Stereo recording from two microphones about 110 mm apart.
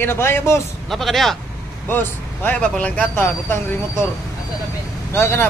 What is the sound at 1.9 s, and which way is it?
Speech, 15° left (ahead or behind).